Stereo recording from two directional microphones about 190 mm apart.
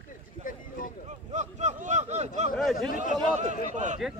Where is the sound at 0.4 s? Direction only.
45° left (ahead or behind).